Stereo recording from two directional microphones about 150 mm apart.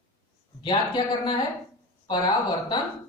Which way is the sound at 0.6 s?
30° left (ahead or behind).